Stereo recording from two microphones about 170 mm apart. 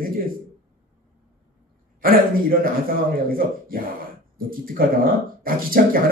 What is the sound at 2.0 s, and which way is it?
A man's voice, 60° right (ahead or behind).